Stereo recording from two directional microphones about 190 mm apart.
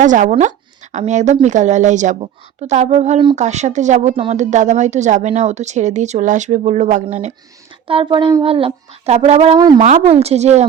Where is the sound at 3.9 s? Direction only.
30° right (ahead or behind).